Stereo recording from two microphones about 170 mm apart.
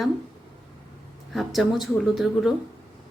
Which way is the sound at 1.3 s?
Centre (ahead or behind).